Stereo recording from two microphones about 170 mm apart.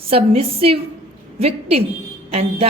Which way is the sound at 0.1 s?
35° right (ahead or behind).